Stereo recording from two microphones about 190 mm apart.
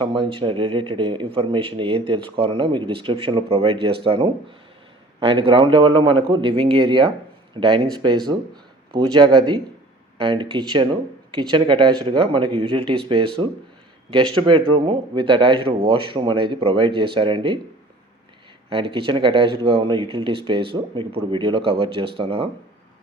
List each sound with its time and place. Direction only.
0.0 s a man's voice: 25° right (ahead or behind)
18.7 s a man's voice: 30° right (ahead or behind)